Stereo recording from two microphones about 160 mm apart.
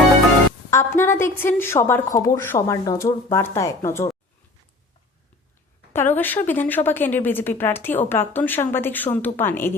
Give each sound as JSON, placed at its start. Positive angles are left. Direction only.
{"t": 0.7, "sound": "speech", "side_deg": 15}
{"t": 5.9, "sound": "speech", "side_deg": 15}